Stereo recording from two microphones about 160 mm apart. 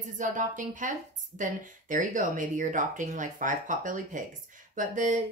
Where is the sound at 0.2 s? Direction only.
50° right (ahead or behind).